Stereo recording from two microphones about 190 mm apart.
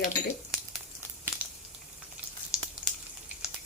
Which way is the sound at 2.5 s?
5° right (ahead or behind).